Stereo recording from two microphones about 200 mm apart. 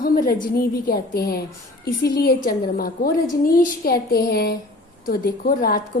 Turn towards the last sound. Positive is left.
turn(degrees=45)  # may be behind; listen again after turning